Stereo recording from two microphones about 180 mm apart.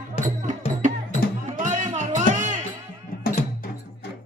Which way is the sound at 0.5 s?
45° right (ahead or behind).